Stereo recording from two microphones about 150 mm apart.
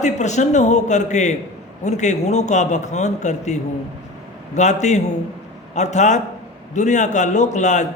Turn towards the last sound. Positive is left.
turn(degrees=50)  # may be behind; listen again after turning